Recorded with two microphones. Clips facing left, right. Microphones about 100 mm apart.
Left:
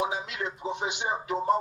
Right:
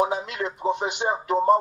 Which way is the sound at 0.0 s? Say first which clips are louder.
Right 6 dB; 50° right (ahead or behind).